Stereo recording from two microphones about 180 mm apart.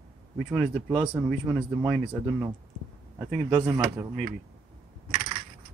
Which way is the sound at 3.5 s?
20° right (ahead or behind).